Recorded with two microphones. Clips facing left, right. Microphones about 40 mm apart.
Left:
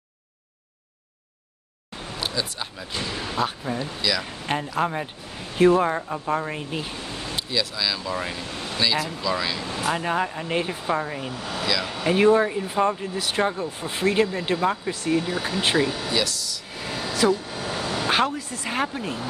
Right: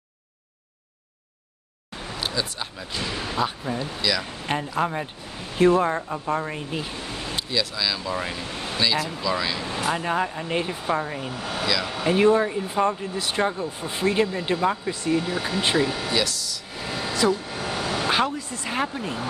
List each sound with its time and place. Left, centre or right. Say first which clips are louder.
2.1 s speech: even; centre
11.3 s speech: right 1 dB; right
11.6 s speech: even; centre
17.1 s vehicle: left 1 dB; centre
17.5 s vehicle: right 1 dB; right
18.0 s speech: left 2 dB; centre